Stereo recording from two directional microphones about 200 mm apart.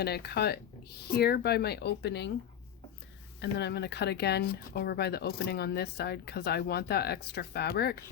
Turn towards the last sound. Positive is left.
turn(degrees=55)  # may be behind; listen again after turning